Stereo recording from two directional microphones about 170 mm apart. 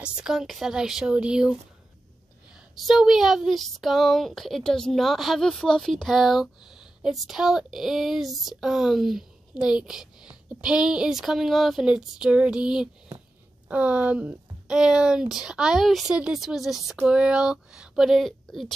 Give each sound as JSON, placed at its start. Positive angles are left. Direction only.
{"t": 0.0, "sound": "speech", "side_deg": -5}
{"t": 2.7, "sound": "speech", "side_deg": 0}